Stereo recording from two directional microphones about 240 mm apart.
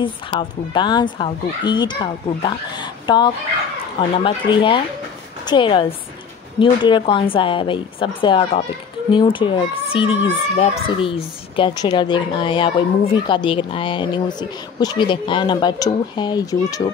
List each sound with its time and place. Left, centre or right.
0.0 s a child's voice: centre